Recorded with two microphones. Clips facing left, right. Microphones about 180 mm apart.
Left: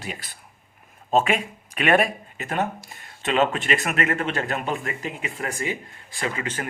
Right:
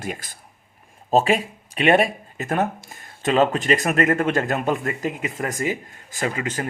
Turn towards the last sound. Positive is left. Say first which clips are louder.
# right 3 dB
turn(degrees=-40)  # may be behind; listen again after turning